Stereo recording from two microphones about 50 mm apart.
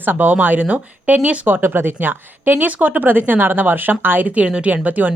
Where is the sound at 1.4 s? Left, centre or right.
Right.